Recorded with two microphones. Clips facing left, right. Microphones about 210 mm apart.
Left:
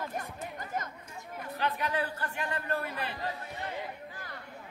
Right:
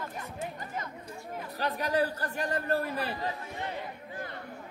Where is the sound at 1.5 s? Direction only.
40° right (ahead or behind).